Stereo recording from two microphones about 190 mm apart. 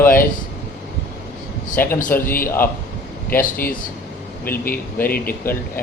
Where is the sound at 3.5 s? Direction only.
50° left (ahead or behind).